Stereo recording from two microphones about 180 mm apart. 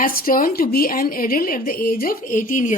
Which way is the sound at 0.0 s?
50° left (ahead or behind).